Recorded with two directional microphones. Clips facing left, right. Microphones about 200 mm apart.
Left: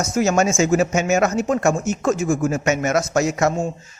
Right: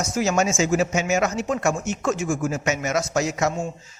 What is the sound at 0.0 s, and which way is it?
Speech, 50° left (ahead or behind).